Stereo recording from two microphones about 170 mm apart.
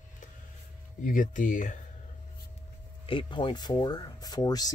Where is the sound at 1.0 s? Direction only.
50° left (ahead or behind).